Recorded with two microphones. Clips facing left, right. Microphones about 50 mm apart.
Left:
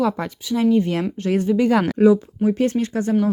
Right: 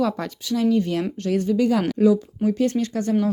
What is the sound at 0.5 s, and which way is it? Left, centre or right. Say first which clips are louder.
Speech: left 2 dB; left.